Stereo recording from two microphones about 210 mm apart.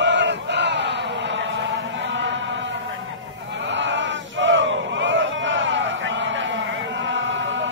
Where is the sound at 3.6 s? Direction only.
60° right (ahead or behind).